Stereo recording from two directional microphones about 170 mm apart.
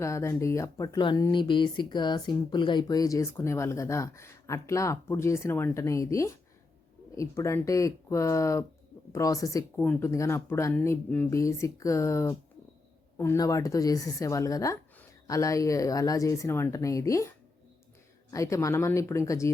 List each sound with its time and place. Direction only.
0.0 s speech: 15° left (ahead or behind)